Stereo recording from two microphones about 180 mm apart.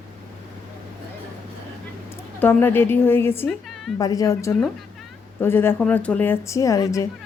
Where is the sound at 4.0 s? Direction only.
20° left (ahead or behind).